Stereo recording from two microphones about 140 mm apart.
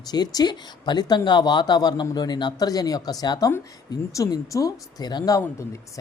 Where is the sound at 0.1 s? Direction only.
30° left (ahead or behind).